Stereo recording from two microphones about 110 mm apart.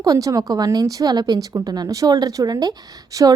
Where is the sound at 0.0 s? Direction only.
30° right (ahead or behind).